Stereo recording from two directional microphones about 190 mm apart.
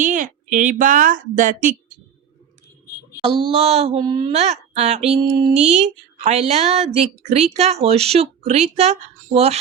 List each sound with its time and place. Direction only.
0.0 s a woman's voice: 40° right (ahead or behind)
3.2 s speech: 30° right (ahead or behind)
4.3 s a woman's voice: 35° right (ahead or behind)